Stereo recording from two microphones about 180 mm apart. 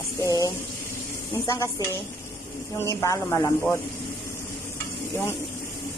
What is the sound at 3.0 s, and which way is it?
Speech, 20° left (ahead or behind).